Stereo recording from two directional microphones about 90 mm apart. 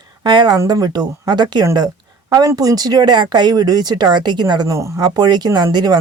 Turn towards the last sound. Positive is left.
turn(degrees=-50)  # may be behind; listen again after turning